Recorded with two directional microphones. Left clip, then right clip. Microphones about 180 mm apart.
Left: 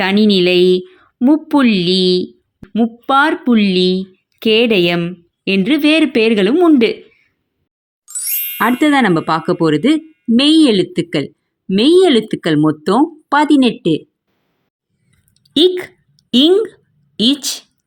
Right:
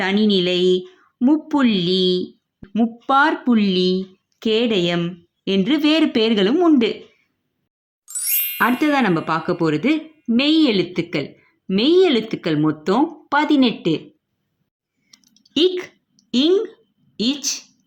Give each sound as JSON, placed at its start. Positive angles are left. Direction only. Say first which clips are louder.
{"t": 0.0, "sound": "speech", "louder": "left 6 dB", "side_deg": 30}
{"t": 2.6, "sound": "speech", "louder": "left 4 dB", "side_deg": 15}
{"t": 8.0, "sound": "ding", "louder": "left 1 dB", "side_deg": 0}
{"t": 8.8, "sound": "speech", "louder": "left 6 dB", "side_deg": 30}
{"t": 15.3, "sound": "a sound", "louder": "left 6 dB", "side_deg": 25}
{"t": 16.3, "sound": "a woman's voice", "louder": "left 6 dB", "side_deg": 35}